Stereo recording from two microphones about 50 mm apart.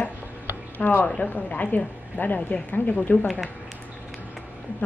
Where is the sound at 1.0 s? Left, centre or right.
Left.